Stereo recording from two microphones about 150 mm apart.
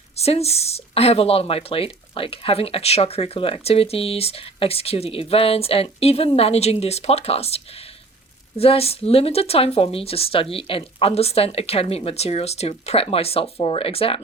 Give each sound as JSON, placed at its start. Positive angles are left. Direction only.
{"t": 0.2, "sound": "speech", "side_deg": 45}